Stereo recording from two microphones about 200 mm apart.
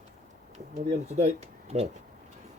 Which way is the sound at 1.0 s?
35° right (ahead or behind).